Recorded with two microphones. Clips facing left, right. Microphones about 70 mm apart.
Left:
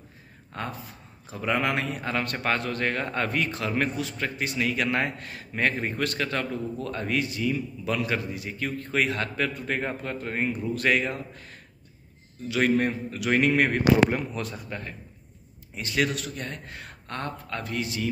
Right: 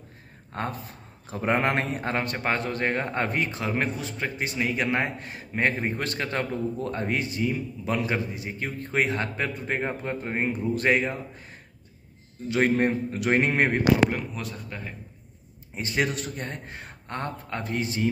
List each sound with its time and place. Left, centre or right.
0.5 s speech: right
2.4 s a man's voice: right
14.1 s speech: centre
15.7 s a man's voice: right